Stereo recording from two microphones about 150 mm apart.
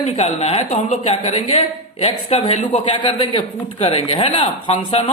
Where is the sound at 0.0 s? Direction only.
45° left (ahead or behind).